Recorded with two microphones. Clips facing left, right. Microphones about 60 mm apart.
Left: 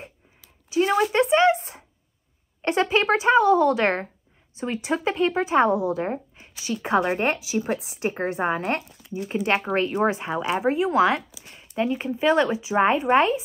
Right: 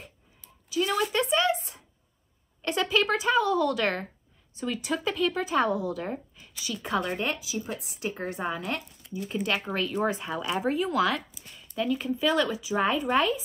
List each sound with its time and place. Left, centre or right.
0.7 s speech: left
7.5 s a woman's voice: left
8.0 s speech: left